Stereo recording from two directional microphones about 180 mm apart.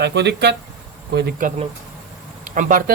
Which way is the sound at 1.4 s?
50° right (ahead or behind).